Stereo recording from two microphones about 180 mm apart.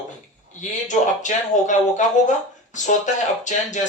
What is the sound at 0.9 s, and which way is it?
Speech, 45° left (ahead or behind).